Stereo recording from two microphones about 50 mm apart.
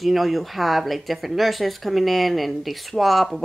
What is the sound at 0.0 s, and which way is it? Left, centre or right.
Speech, centre.